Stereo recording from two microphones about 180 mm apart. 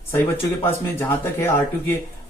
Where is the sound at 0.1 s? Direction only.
10° left (ahead or behind).